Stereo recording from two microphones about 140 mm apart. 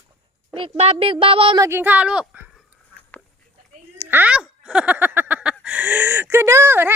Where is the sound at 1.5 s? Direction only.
20° right (ahead or behind).